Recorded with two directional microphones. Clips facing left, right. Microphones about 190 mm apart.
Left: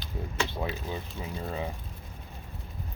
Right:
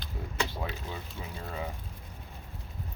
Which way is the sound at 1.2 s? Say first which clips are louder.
Left 3 dB; 20° left (ahead or behind).